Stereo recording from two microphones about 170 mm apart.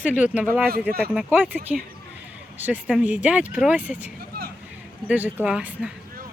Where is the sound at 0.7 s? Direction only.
65° right (ahead or behind).